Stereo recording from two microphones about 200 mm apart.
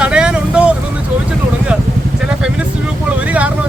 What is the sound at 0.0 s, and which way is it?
Vehicle, 5° right (ahead or behind).